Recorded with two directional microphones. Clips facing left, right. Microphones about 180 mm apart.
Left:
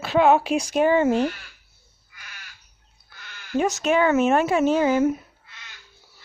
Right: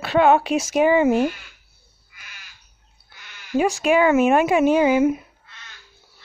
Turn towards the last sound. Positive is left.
turn(degrees=-10)  # may be behind; listen again after turning